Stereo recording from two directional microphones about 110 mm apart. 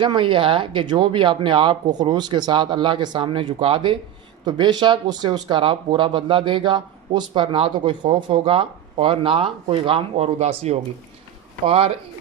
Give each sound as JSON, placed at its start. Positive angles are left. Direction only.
{"t": 0.0, "sound": "speech", "side_deg": -50}
{"t": 11.6, "sound": "speech", "side_deg": -60}